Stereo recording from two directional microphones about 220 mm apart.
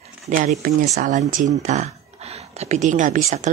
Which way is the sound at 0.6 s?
35° right (ahead or behind).